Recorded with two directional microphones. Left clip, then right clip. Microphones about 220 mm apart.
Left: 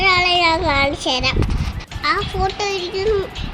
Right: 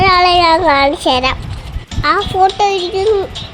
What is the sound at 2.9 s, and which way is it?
Speech, 15° right (ahead or behind).